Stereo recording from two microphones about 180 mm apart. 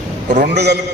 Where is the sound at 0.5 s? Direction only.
65° right (ahead or behind).